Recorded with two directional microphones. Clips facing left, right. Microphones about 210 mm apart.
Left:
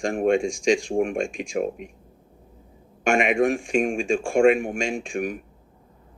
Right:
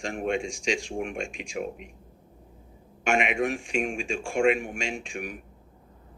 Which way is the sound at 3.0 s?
50° left (ahead or behind).